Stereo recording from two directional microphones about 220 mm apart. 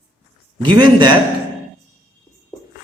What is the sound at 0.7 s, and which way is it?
Speech, 20° right (ahead or behind).